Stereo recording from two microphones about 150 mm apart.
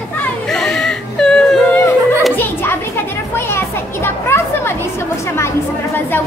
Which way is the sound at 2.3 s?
15° left (ahead or behind).